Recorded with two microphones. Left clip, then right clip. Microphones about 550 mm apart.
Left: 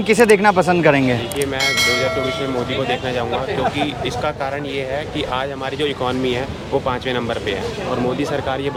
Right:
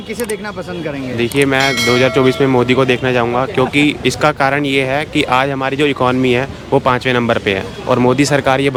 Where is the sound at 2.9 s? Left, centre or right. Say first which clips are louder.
Right 6 dB; right.